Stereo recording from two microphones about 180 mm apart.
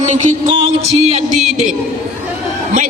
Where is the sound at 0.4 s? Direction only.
30° right (ahead or behind).